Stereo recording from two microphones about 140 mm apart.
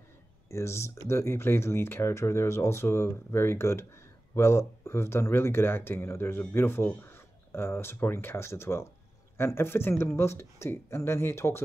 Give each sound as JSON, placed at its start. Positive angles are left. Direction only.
{"t": 0.5, "sound": "speech", "side_deg": 20}